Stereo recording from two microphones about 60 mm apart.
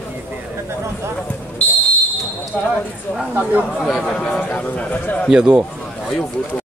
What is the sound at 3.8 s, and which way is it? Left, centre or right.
Speech, centre.